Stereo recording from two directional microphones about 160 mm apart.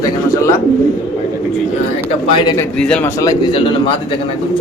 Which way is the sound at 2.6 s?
5° left (ahead or behind).